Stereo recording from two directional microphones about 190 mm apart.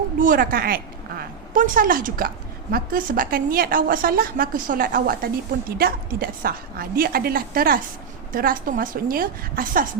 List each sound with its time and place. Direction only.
0.2 s a woman's voice: 45° right (ahead or behind)